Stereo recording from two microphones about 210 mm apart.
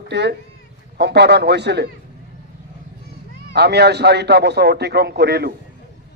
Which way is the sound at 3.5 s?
50° right (ahead or behind).